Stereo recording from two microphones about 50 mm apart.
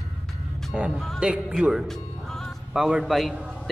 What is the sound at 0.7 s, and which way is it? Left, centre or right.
Speech, centre.